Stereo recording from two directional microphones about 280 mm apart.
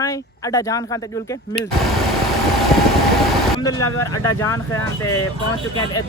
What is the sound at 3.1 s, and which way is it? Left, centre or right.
Vehicle, centre.